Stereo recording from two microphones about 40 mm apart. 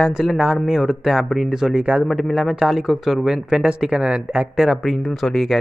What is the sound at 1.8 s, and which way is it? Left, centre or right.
Speech, right.